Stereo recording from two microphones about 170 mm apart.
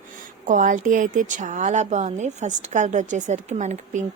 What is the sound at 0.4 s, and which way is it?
A woman's voice, 50° right (ahead or behind).